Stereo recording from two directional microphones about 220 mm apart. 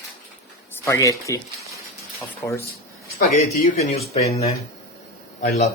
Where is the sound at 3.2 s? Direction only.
35° left (ahead or behind).